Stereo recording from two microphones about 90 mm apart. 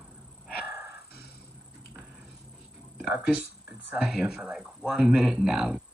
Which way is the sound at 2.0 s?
20° right (ahead or behind).